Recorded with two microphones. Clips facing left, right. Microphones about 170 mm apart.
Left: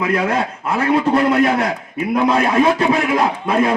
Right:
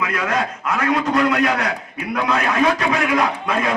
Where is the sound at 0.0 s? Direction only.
30° left (ahead or behind).